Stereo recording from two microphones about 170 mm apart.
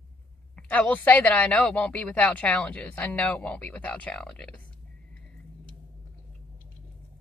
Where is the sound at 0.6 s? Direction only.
10° left (ahead or behind).